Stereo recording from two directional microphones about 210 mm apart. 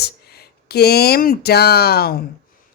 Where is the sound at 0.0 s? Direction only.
50° left (ahead or behind).